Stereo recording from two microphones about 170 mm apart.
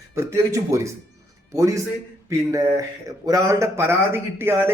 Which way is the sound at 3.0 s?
20° right (ahead or behind).